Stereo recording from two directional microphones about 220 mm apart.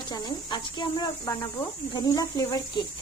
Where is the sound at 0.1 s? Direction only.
20° left (ahead or behind).